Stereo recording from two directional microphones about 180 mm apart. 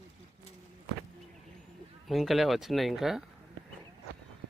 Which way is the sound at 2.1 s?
Centre (ahead or behind).